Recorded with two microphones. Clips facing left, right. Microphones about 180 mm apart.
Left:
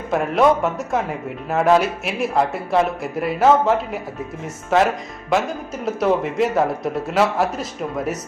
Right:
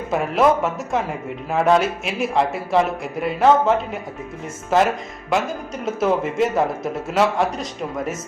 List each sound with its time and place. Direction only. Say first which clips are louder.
0.1 s a man's voice: left 1 dB; centre (ahead or behind)